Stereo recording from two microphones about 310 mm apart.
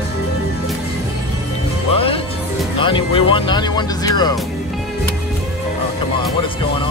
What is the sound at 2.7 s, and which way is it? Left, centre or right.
Speech, centre.